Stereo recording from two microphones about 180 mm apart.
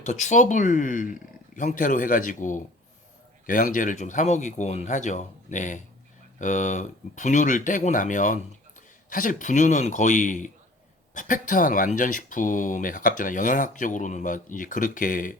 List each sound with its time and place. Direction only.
0.0 s speech: 40° left (ahead or behind)